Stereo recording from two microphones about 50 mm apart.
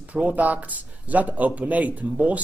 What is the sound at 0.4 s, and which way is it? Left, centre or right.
Speech, right.